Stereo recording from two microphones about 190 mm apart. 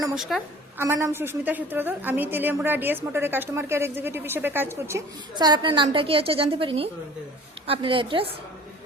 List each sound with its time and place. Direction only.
0.1 s a woman's voice: centre (ahead or behind)
0.8 s a woman's voice: 15° right (ahead or behind)